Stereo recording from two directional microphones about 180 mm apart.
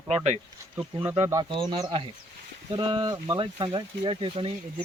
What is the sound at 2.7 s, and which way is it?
Speech, 30° right (ahead or behind).